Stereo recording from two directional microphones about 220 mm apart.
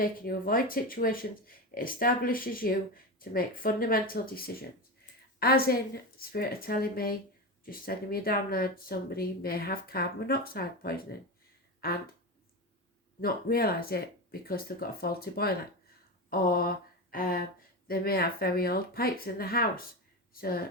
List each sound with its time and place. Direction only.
0.0 s speech: 40° left (ahead or behind)
13.2 s speech: 45° left (ahead or behind)
16.3 s a sound: 40° left (ahead or behind)
17.8 s speech: 40° left (ahead or behind)